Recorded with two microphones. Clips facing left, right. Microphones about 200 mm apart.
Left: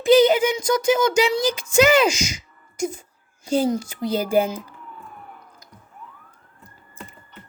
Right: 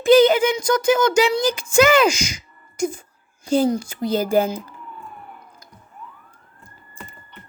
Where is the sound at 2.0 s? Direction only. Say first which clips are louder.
Right 2 dB; 20° left (ahead or behind).